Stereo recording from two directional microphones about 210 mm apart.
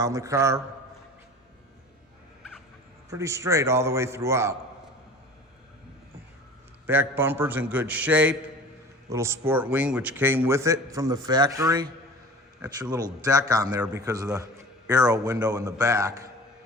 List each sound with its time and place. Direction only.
0.0 s speech: 15° right (ahead or behind)
3.1 s speech: 15° right (ahead or behind)
6.8 s speech: 10° right (ahead or behind)